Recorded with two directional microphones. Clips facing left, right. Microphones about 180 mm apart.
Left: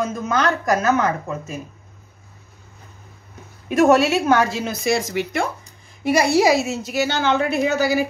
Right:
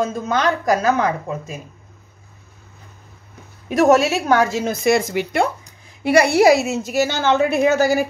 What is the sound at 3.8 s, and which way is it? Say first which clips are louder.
A woman's voice: even; 40° right (ahead or behind).